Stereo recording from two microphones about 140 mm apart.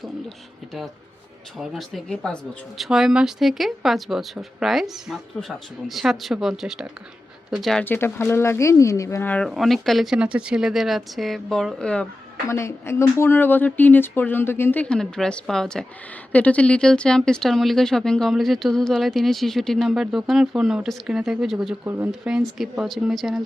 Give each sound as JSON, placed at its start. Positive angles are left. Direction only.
{"t": 1.5, "sound": "speech", "side_deg": 0}
{"t": 7.9, "sound": "speech", "side_deg": 15}
{"t": 9.5, "sound": "speech", "side_deg": 0}
{"t": 12.5, "sound": "speech", "side_deg": 20}
{"t": 21.8, "sound": "speech", "side_deg": -15}